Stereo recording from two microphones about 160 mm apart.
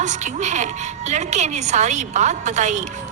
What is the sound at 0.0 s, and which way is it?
A woman's voice, 50° right (ahead or behind).